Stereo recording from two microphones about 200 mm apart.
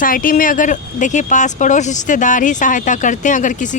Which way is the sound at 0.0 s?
45° left (ahead or behind).